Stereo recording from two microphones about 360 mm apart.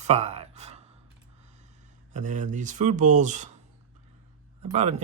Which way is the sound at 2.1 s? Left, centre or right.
Right.